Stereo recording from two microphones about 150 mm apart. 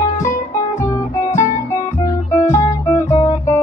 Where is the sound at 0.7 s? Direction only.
20° left (ahead or behind).